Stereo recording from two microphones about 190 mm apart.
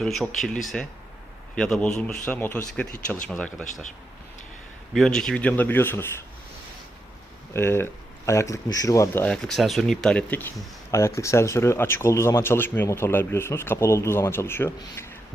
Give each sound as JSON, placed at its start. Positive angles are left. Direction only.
{"t": 0.0, "sound": "a man's voice", "side_deg": 0}
{"t": 4.9, "sound": "speech", "side_deg": 5}
{"t": 7.5, "sound": "speech", "side_deg": 10}